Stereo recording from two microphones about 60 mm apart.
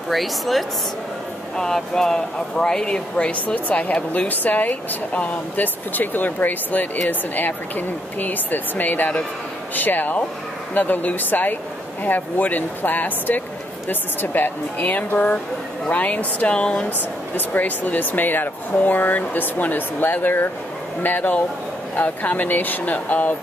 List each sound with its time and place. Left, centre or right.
0.1 s a woman's voice: centre
17.6 s speech: left